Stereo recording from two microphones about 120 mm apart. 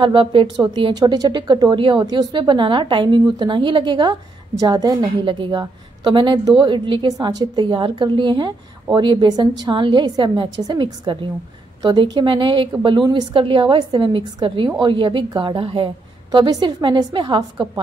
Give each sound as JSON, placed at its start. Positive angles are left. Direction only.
{"t": 0.0, "sound": "a woman's voice", "side_deg": -45}
{"t": 0.6, "sound": "a woman's voice", "side_deg": -35}
{"t": 5.2, "sound": "a woman's voice", "side_deg": -45}
{"t": 16.3, "sound": "a woman's voice", "side_deg": -35}